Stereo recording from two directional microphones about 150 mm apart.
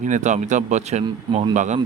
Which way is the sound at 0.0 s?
55° right (ahead or behind).